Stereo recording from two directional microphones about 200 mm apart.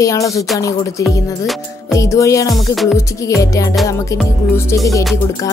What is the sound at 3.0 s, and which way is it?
Speech, 15° left (ahead or behind).